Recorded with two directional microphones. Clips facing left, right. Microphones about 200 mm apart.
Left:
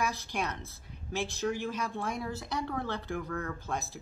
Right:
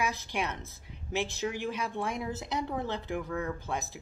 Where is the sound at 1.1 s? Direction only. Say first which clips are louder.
Even; 15° right (ahead or behind).